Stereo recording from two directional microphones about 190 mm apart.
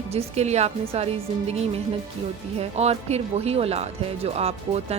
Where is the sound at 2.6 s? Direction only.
35° right (ahead or behind).